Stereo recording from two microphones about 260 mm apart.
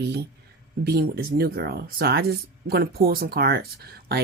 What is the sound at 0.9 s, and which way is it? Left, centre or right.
Speech, right.